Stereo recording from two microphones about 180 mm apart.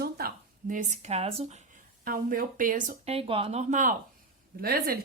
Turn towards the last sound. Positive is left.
turn(degrees=-55)  # may be behind; listen again after turning